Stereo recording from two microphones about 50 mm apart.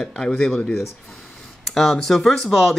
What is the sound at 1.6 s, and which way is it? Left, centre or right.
Speech, centre.